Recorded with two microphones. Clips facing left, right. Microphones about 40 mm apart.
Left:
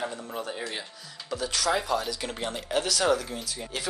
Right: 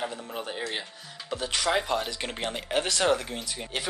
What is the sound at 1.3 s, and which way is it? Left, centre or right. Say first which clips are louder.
Speech: even; right.